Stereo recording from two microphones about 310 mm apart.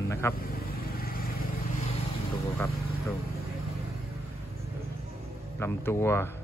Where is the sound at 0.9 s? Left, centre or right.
Left.